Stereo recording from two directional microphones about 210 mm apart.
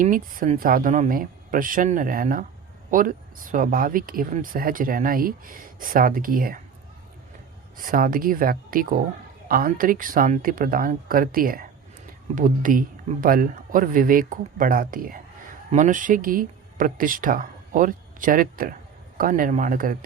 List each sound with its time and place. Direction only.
0.0 s speech: 40° right (ahead or behind)
7.8 s speech: 40° right (ahead or behind)